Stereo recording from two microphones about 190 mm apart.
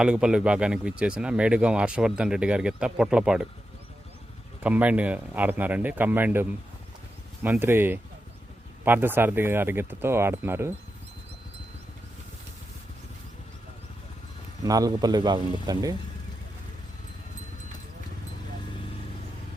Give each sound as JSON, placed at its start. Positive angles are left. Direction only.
{"t": 0.0, "sound": "speech", "side_deg": -5}
{"t": 4.6, "sound": "speech", "side_deg": -10}
{"t": 14.6, "sound": "a man's voice", "side_deg": -20}